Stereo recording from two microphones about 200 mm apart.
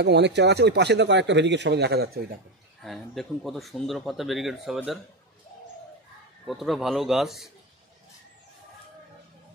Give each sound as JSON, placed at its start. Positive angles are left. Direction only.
{"t": 0.0, "sound": "speech", "side_deg": -60}
{"t": 2.8, "sound": "speech", "side_deg": 0}
{"t": 6.4, "sound": "speech", "side_deg": 0}